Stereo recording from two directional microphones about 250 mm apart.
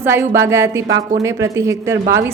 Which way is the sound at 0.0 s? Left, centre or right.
Centre.